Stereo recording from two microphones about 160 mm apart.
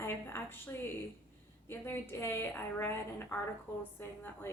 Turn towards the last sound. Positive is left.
turn(degrees=15)  # may be behind; listen again after turning